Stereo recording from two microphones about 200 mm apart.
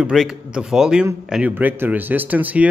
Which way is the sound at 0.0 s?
5° right (ahead or behind).